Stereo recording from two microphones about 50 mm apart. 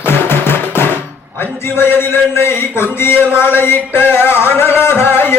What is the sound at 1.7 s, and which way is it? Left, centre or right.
Speech, left.